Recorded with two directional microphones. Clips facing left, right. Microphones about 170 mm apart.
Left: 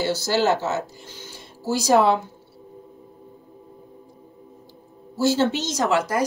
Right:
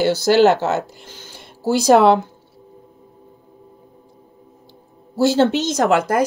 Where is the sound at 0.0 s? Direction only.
70° right (ahead or behind).